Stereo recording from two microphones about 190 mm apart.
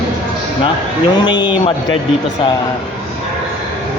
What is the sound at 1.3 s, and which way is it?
Speech, 25° left (ahead or behind).